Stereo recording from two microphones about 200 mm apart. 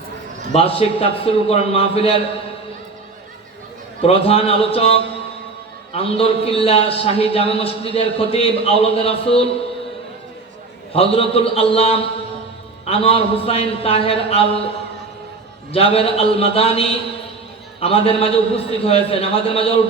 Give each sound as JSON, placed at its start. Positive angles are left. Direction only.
{"t": 0.5, "sound": "a man's voice", "side_deg": 30}
{"t": 4.0, "sound": "a man's voice", "side_deg": 30}
{"t": 10.9, "sound": "a man's voice", "side_deg": 30}
{"t": 15.7, "sound": "a man's voice", "side_deg": 30}